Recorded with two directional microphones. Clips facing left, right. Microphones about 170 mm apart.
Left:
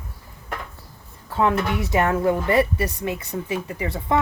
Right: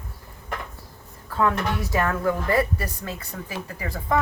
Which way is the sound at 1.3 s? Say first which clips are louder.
Left 2 dB; 20° left (ahead or behind).